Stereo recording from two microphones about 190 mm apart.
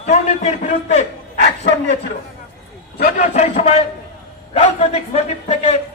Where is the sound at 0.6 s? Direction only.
35° left (ahead or behind).